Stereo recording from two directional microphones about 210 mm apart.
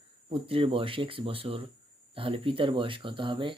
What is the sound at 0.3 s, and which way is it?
Speech, 25° right (ahead or behind).